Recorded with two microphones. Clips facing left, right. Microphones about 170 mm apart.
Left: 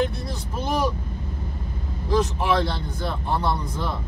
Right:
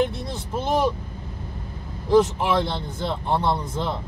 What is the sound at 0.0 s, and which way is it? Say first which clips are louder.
Vehicle: right 1 dB; 20° right (ahead or behind).